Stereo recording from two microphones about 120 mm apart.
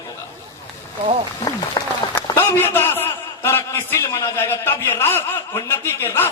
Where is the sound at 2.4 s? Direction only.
20° left (ahead or behind).